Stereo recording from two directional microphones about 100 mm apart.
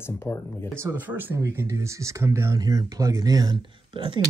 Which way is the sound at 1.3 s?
30° right (ahead or behind).